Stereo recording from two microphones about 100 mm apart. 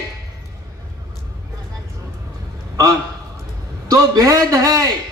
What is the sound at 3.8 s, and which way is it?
A man's voice, 35° right (ahead or behind).